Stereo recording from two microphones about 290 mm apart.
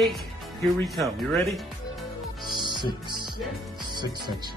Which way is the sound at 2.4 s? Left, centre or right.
Centre.